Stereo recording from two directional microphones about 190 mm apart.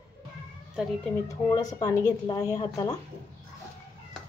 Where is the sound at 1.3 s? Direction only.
20° left (ahead or behind).